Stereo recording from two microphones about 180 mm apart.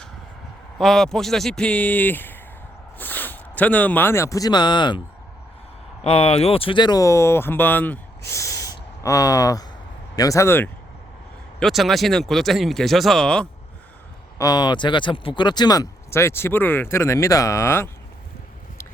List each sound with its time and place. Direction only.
0.8 s speech: centre (ahead or behind); by 4.9 s 25° left (ahead or behind)
6.0 s speech: 35° left (ahead or behind); by 7.9 s 10° left (ahead or behind)
8.3 s a sound: 15° left (ahead or behind)
10.2 s speech: 15° left (ahead or behind)
11.6 s speech: centre (ahead or behind)
14.3 s speech: 20° left (ahead or behind)